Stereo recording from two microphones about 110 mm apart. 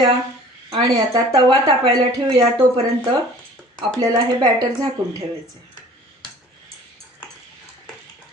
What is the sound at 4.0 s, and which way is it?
Speech, 40° right (ahead or behind).